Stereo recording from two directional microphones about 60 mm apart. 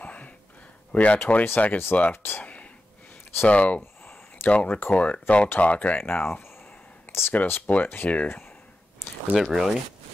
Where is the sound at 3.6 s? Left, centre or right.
Left.